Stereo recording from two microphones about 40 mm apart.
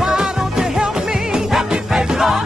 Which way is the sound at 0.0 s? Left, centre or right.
Centre.